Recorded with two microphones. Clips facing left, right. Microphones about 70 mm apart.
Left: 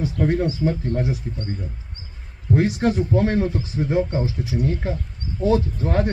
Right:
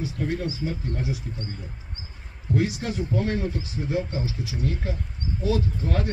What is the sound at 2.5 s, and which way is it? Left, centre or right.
Speech, left.